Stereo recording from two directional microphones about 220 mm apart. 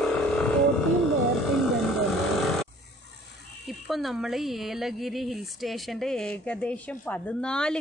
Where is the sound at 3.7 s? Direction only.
Centre (ahead or behind).